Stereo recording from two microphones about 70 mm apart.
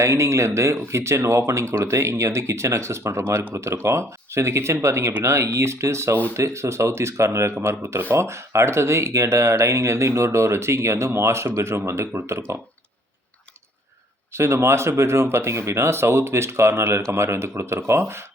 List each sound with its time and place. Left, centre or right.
0.0 s speech: right
14.3 s speech: right